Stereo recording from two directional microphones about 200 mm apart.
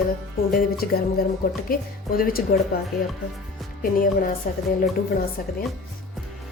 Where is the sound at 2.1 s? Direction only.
45° left (ahead or behind).